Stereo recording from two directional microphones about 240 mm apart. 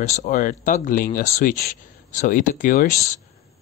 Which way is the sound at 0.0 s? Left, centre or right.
Left.